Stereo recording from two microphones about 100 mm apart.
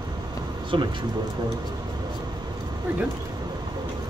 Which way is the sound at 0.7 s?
60° right (ahead or behind).